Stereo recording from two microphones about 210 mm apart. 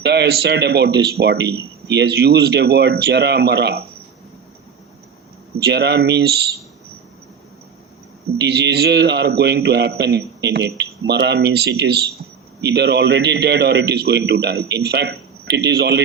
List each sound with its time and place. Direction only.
0.0 s speech: 50° right (ahead or behind)
5.5 s speech: 50° right (ahead or behind)
8.4 s speech: 50° right (ahead or behind)